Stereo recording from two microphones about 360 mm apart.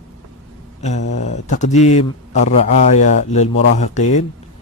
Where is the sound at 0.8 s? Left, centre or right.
Centre.